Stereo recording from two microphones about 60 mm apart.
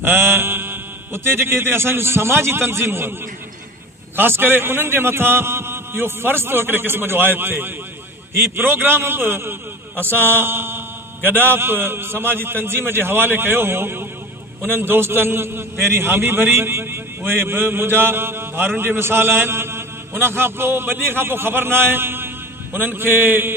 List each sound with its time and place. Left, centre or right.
0.0 s a man's voice: right
4.2 s a man's voice: right